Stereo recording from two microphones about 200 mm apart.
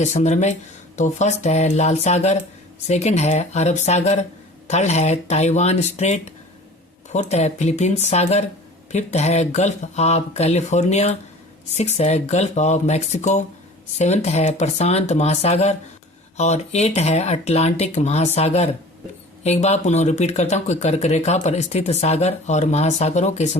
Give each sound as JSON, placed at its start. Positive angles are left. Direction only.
{"t": 0.0, "sound": "speech", "side_deg": 35}